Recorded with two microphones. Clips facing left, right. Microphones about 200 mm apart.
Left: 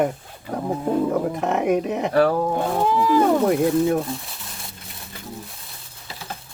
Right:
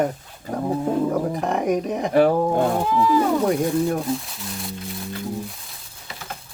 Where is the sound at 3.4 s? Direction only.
Centre (ahead or behind).